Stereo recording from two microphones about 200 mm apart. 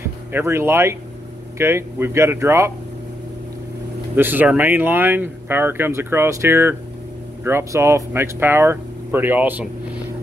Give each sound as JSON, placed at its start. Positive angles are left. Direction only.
{"t": 0.0, "sound": "speech", "side_deg": -10}
{"t": 4.1, "sound": "speech", "side_deg": -10}